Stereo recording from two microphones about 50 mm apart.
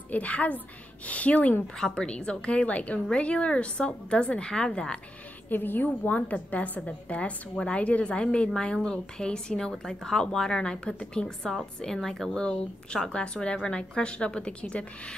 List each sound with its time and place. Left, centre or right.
0.1 s a woman's voice: left
1.8 s a woman's voice: centre
5.5 s a woman's voice: left; by 12.3 s centre
12.4 s a woman's voice: centre